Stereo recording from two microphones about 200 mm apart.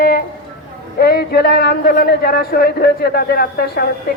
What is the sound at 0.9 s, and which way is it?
Speech, 50° left (ahead or behind).